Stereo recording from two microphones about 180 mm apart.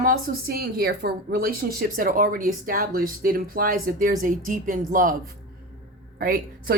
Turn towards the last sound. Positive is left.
turn(degrees=-55)  # may be behind; listen again after turning